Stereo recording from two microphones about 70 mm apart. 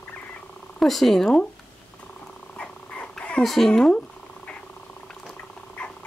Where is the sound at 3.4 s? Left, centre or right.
Centre.